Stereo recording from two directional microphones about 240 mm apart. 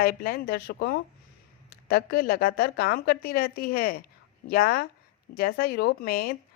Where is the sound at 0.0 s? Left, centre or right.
Left.